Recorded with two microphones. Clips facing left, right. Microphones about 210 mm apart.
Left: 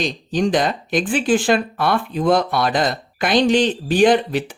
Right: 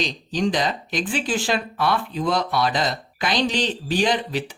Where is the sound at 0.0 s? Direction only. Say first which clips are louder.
Left 4 dB; 50° left (ahead or behind).